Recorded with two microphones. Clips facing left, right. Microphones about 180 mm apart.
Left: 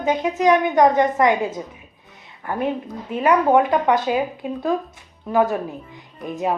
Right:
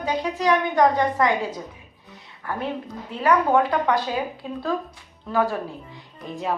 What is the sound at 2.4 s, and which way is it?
A woman's voice, 20° left (ahead or behind).